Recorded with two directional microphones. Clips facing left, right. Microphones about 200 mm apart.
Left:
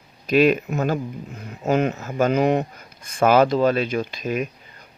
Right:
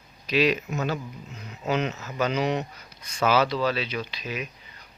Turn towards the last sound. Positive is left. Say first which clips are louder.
# left 8 dB
turn(degrees=50)  # may be behind; listen again after turning